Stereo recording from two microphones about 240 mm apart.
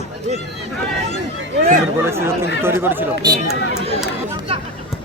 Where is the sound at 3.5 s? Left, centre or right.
Left.